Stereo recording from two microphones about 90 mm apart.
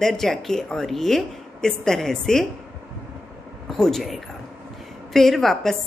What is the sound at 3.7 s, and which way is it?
A woman's voice, 5° left (ahead or behind).